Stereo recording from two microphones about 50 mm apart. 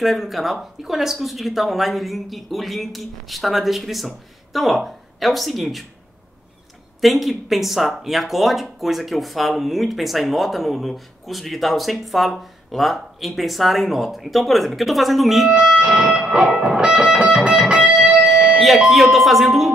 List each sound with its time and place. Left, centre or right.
0.0 s speech: centre
7.0 s speech: centre
15.5 s speech: centre
15.8 s music: centre
17.5 s music: right
18.9 s speech: centre